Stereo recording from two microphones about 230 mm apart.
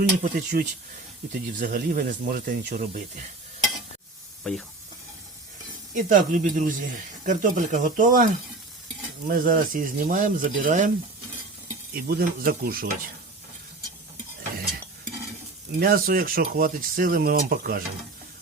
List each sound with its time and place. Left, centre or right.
0.0 s speech: right
4.4 s speech: centre
5.9 s speech: right
11.9 s speech: right
15.8 s speech: right